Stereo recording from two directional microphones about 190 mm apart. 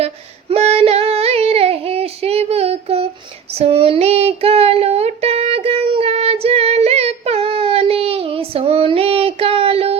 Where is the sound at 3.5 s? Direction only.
30° right (ahead or behind).